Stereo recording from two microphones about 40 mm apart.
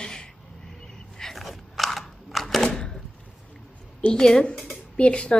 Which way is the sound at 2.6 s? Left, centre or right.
Centre.